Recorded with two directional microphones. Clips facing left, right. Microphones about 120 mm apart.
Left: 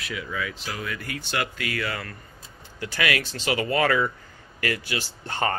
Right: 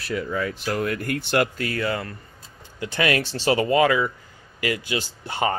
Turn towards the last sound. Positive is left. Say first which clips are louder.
# right 2 dB
turn(degrees=-15)  # may be behind; listen again after turning